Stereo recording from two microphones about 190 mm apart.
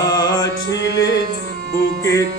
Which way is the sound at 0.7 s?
60° left (ahead or behind).